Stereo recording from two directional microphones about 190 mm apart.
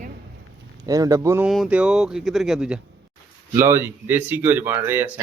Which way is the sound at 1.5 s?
5° right (ahead or behind).